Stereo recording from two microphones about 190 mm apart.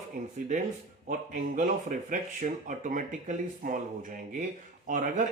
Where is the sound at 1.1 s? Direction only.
45° right (ahead or behind).